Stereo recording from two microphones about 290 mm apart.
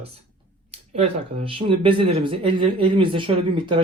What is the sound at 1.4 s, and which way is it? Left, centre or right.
Speech, centre.